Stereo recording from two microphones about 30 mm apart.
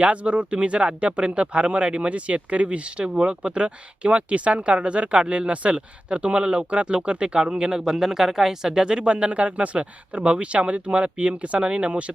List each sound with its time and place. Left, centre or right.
0.0 s speech: right
7.7 s speech: centre
8.8 s speech: right